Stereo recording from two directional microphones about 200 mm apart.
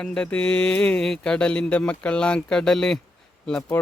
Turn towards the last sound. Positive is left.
turn(degrees=5)  # may be behind; listen again after turning